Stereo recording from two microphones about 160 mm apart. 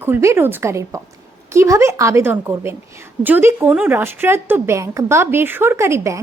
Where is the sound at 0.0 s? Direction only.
15° right (ahead or behind).